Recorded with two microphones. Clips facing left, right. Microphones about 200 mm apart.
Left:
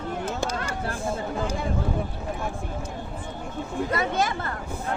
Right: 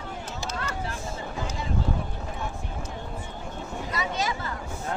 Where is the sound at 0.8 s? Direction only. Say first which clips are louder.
Left 6 dB; 55° left (ahead or behind).